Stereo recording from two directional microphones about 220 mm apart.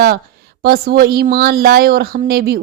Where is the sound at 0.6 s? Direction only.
45° right (ahead or behind).